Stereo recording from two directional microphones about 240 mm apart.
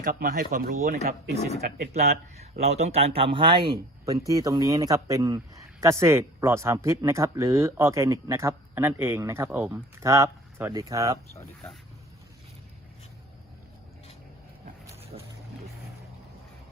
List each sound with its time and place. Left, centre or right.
0.0 s speech: right
2.4 s speech: right
11.3 s speech: centre
15.1 s boat: right